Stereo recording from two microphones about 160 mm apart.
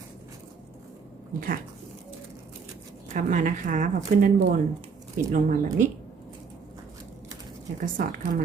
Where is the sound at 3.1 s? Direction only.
55° right (ahead or behind).